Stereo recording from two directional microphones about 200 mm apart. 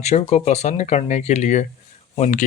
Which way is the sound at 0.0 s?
35° left (ahead or behind).